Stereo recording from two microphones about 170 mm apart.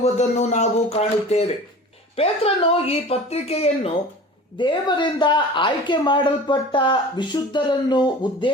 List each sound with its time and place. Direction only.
0.0 s speech: 40° left (ahead or behind)
4.5 s speech: 25° left (ahead or behind)